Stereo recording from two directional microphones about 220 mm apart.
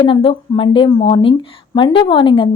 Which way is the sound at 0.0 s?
25° left (ahead or behind).